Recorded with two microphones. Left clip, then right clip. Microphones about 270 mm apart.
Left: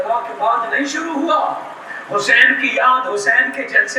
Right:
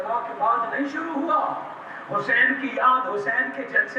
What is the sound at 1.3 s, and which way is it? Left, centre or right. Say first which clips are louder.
A man's voice: left 6 dB; centre.